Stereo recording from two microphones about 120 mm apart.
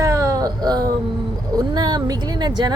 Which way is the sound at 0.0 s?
30° right (ahead or behind).